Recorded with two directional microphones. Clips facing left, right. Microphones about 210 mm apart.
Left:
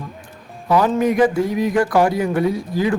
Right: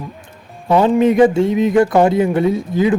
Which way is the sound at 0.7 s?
25° right (ahead or behind).